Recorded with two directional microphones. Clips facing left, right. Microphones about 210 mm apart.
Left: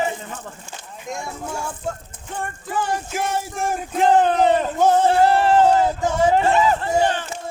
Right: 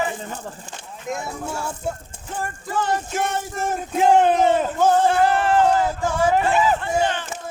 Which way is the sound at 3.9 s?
5° right (ahead or behind).